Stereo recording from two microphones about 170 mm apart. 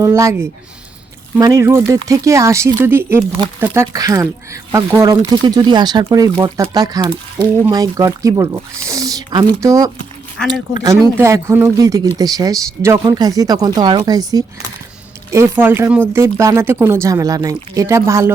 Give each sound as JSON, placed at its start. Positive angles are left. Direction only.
{"t": 0.0, "sound": "speech", "side_deg": -20}